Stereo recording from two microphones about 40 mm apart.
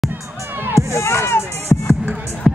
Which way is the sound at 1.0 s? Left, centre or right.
Left.